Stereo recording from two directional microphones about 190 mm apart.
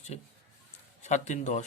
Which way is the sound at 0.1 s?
35° left (ahead or behind).